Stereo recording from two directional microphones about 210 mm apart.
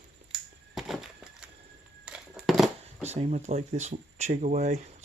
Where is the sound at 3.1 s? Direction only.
30° right (ahead or behind).